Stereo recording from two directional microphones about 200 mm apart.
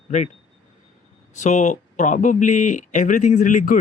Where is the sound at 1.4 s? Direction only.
35° left (ahead or behind).